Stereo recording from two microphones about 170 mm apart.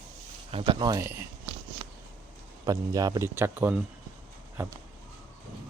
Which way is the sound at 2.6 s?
20° right (ahead or behind).